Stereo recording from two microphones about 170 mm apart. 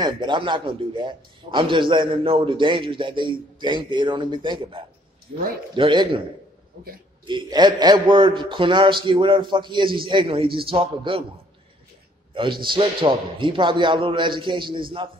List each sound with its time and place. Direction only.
0.0 s a man's voice: 25° right (ahead or behind)
7.2 s a man's voice: 25° right (ahead or behind)
12.6 s a man's voice: 30° right (ahead or behind)